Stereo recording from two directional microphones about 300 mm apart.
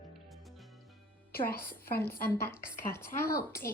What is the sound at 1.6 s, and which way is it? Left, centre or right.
Speech, centre.